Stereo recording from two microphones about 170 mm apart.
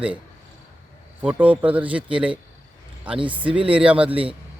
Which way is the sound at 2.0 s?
30° right (ahead or behind).